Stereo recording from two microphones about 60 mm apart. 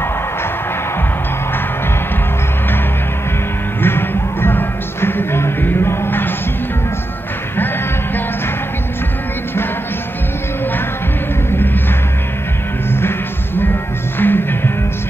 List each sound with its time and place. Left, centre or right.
3.8 s music: left
11.5 s music: left
14.1 s music: left